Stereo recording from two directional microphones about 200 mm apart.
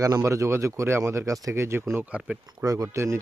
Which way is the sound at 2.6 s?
15° right (ahead or behind).